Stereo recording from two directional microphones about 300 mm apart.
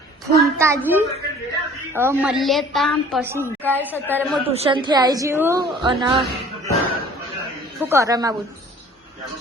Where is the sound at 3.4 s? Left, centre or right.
Centre.